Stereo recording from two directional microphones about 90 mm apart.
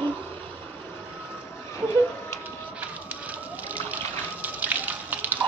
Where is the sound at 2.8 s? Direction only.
15° right (ahead or behind).